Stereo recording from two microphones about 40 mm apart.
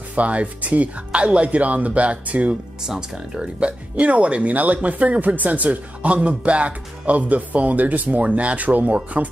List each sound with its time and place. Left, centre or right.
0.1 s speech: right
2.8 s speech: centre; by 9.3 s right